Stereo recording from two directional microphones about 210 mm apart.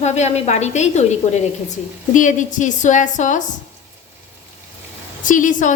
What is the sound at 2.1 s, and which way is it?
A woman's voice, 35° left (ahead or behind).